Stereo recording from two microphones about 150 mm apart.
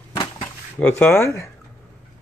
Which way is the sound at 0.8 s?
10° left (ahead or behind).